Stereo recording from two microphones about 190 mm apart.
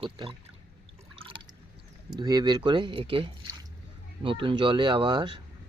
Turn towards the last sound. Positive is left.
turn(degrees=-25)  # may be behind; listen again after turning